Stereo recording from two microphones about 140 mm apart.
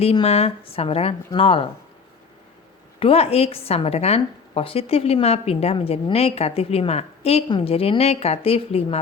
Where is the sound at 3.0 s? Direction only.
45° left (ahead or behind).